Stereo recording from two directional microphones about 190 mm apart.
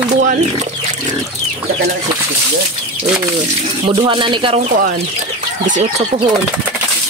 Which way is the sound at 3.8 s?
30° right (ahead or behind).